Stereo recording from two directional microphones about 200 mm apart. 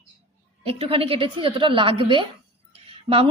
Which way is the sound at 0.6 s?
30° right (ahead or behind).